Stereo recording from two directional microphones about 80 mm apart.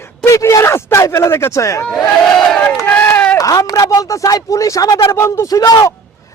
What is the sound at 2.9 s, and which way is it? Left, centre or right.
Run, left.